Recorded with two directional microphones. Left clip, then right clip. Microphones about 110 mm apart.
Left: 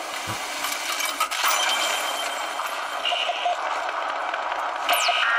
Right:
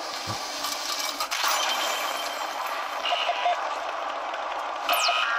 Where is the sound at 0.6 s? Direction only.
Centre (ahead or behind).